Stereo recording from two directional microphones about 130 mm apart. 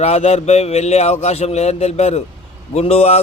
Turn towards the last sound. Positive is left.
turn(degrees=55)  # may be behind; listen again after turning